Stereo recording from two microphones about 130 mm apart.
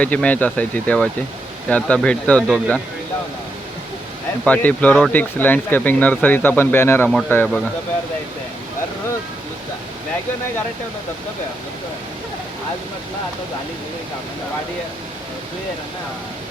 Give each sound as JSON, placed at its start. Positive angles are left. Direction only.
{"t": 0.0, "sound": "speech", "side_deg": 10}
{"t": 4.4, "sound": "speech", "side_deg": 10}